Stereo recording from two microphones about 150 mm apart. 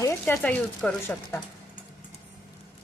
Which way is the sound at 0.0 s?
15° left (ahead or behind).